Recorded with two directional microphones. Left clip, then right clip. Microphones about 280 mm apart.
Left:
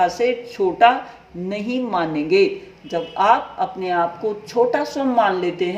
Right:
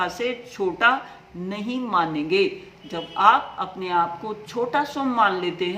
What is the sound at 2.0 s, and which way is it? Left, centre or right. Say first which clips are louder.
Speech: left 7 dB; right.